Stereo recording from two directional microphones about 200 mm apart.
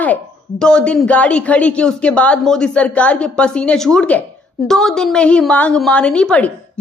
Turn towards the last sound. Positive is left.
turn(degrees=5)  # may be behind; listen again after turning